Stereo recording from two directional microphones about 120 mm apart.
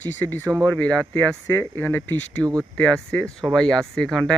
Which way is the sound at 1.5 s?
20° left (ahead or behind).